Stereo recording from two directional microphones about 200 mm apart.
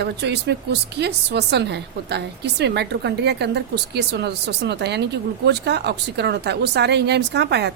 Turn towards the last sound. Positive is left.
turn(degrees=-55)  # may be behind; listen again after turning